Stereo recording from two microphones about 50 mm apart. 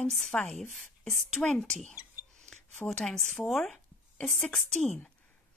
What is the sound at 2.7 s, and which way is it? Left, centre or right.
Speech, centre.